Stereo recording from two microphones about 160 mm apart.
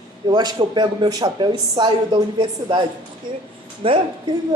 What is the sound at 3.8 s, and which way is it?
Speech, 35° right (ahead or behind).